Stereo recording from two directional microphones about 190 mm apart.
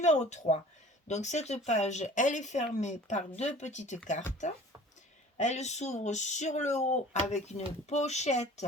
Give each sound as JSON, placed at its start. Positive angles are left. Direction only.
{"t": 0.0, "sound": "speech", "side_deg": 35}
{"t": 5.4, "sound": "speech", "side_deg": 35}